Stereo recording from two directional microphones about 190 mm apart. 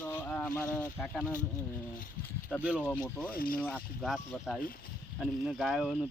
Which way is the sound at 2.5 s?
Centre (ahead or behind).